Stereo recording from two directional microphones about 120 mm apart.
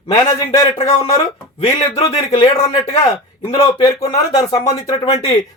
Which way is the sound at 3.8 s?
35° left (ahead or behind).